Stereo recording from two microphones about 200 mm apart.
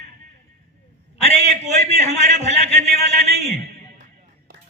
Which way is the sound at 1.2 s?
30° left (ahead or behind).